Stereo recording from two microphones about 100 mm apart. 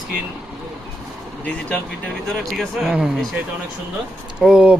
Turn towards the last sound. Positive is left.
turn(degrees=-10)  # may be behind; listen again after turning